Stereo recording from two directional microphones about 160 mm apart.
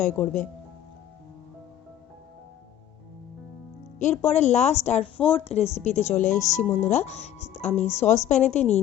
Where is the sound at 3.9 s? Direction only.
45° left (ahead or behind).